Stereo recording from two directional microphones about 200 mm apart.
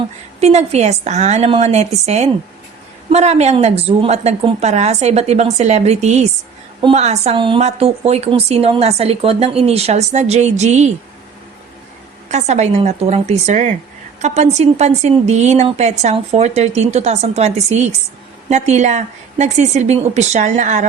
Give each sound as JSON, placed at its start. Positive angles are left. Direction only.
{"t": 0.3, "sound": "a woman's voice", "side_deg": -35}
{"t": 12.3, "sound": "a woman's voice", "side_deg": -35}